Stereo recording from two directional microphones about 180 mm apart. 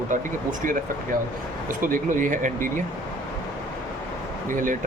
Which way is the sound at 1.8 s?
50° right (ahead or behind).